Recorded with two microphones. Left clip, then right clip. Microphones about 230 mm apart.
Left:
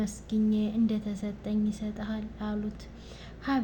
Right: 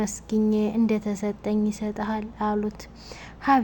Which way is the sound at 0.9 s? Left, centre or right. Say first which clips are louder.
Right 9 dB; right.